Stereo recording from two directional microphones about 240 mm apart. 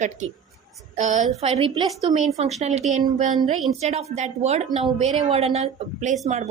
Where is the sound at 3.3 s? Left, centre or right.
Centre.